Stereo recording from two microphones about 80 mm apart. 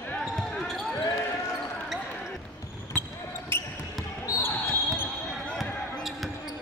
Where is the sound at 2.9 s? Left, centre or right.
Left.